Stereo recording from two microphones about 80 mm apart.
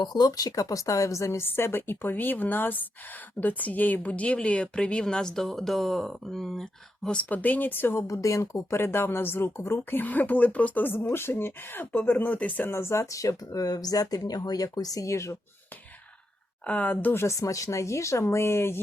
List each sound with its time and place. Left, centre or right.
0.0 s a woman's voice: left; by 7.2 s centre
7.2 s a woman's voice: left
8.0 s a woman's voice: left
16.6 s a woman's voice: centre
17.2 s speech: left